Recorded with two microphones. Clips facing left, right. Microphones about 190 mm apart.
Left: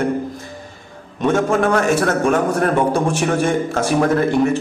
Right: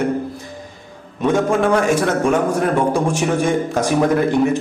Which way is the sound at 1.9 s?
10° right (ahead or behind).